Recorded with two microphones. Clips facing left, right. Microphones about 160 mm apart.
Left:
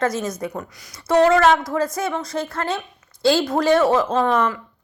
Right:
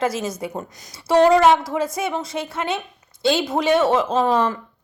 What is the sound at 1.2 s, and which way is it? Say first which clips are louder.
A woman's voice: right 1 dB; 15° right (ahead or behind).